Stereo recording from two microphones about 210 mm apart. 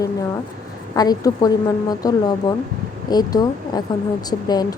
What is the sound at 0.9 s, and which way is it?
A woman's voice, 20° left (ahead or behind).